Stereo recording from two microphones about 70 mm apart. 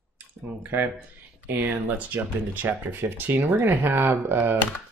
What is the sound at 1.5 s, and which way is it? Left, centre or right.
Speech, right.